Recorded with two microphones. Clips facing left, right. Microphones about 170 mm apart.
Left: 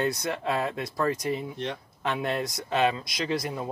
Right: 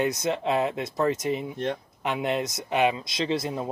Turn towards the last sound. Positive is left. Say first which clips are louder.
# right 2 dB
turn(degrees=-25)  # may be behind; listen again after turning